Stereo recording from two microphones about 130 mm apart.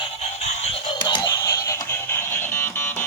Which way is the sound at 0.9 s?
40° left (ahead or behind).